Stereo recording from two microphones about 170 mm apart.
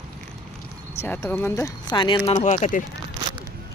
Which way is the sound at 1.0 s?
15° left (ahead or behind).